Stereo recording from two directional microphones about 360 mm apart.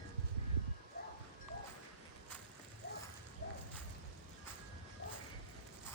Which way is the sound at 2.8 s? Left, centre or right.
Left.